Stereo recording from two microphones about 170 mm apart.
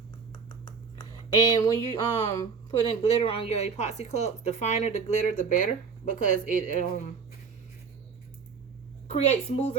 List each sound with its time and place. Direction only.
0.9 s speech: 25° left (ahead or behind)
3.0 s speech: 35° left (ahead or behind)
9.1 s speech: 40° left (ahead or behind)